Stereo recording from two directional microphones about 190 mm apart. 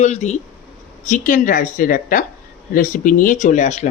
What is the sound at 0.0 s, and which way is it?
A woman's voice, 35° left (ahead or behind).